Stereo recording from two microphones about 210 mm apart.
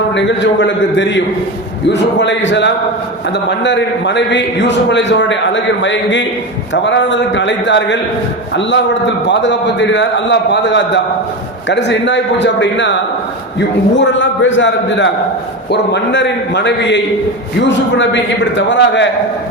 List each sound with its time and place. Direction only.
0.1 s a man's voice: 60° left (ahead or behind)
14.0 s a man's voice: 60° left (ahead or behind)